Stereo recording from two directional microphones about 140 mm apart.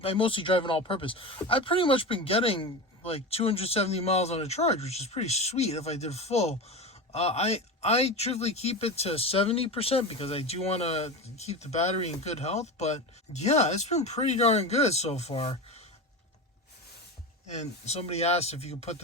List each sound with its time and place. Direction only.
0.0 s speech: 40° left (ahead or behind)
17.6 s speech: 50° left (ahead or behind)